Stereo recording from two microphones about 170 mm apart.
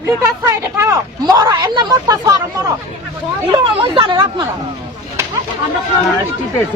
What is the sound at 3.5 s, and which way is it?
Speech, 30° right (ahead or behind).